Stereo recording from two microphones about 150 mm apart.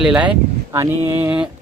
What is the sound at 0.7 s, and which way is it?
Speech, 15° right (ahead or behind).